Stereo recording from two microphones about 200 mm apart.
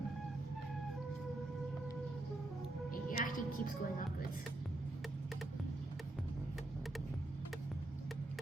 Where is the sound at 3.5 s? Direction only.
45° left (ahead or behind).